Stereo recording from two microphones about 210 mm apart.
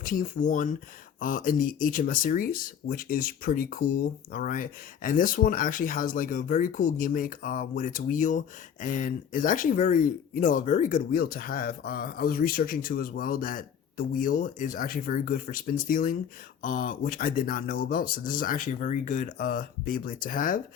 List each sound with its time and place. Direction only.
0.0 s speech: 40° left (ahead or behind)